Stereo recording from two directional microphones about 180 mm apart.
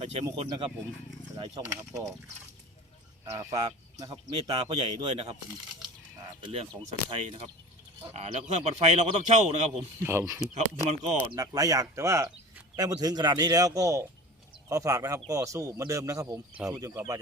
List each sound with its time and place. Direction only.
0.0 s a man's voice: 35° right (ahead or behind)
1.4 s speech: 20° right (ahead or behind)
3.3 s speech: 20° right (ahead or behind)
6.4 s a man's voice: 35° right (ahead or behind)
9.7 s speech: 15° right (ahead or behind)
10.5 s a man's voice: 40° right (ahead or behind)
11.3 s speech: 20° right (ahead or behind)